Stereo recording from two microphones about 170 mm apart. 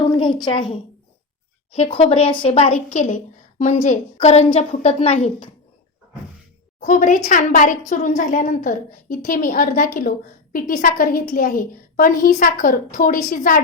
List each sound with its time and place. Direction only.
0.4 s a woman's voice: 30° left (ahead or behind)
6.7 s a woman's voice: 50° left (ahead or behind)